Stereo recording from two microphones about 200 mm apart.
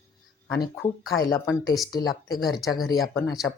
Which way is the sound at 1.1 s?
20° left (ahead or behind).